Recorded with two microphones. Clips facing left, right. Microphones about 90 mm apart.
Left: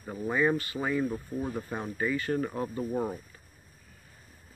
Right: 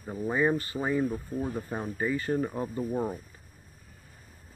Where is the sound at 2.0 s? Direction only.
25° right (ahead or behind).